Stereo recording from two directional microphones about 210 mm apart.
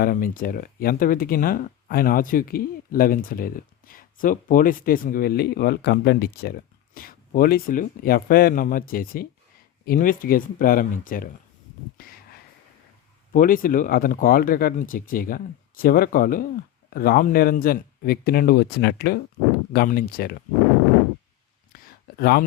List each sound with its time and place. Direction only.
0.0 s speech: 40° left (ahead or behind)
13.3 s speech: 40° left (ahead or behind)
21.7 s a sound: 45° left (ahead or behind)